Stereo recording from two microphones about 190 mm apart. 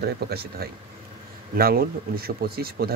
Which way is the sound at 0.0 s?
55° right (ahead or behind).